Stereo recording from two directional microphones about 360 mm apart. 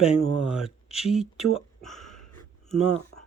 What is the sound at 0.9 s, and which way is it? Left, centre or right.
Speech, centre.